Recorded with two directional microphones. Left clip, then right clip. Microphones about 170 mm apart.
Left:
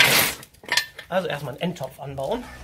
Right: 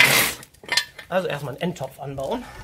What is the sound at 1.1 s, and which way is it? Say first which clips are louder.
Speech: right 1 dB; 40° right (ahead or behind).